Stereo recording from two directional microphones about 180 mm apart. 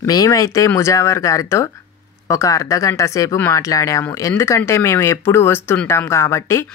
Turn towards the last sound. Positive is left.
turn(degrees=15)  # may be behind; listen again after turning